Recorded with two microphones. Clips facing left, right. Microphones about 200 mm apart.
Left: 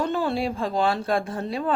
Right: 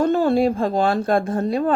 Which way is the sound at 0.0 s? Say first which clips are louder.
Right 8 dB; 45° right (ahead or behind).